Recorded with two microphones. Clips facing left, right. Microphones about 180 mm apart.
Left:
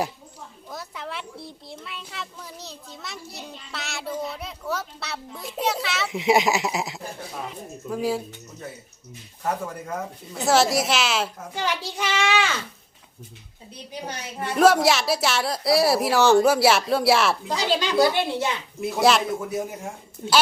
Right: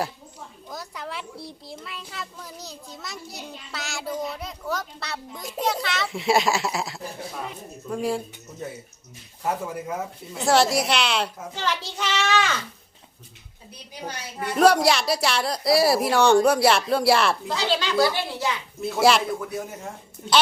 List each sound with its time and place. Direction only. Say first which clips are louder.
0.7 s a child's voice: even; centre (ahead or behind)
6.1 s a child's voice: left 2 dB; 20° left (ahead or behind)
7.9 s a child's voice: left 1 dB; centre (ahead or behind)
9.4 s a child's voice: right 1 dB; 10° right (ahead or behind); by 12.5 s 10° left (ahead or behind)
14.5 s a child's voice: even; centre (ahead or behind)
17.5 s a child's voice: left 1 dB; 15° left (ahead or behind)
18.9 s a child's voice: even; centre (ahead or behind)
19.3 s a man's voice: left 2 dB; 20° left (ahead or behind)